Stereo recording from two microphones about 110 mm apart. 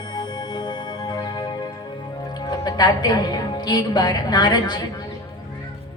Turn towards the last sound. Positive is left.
turn(degrees=40)  # may be behind; listen again after turning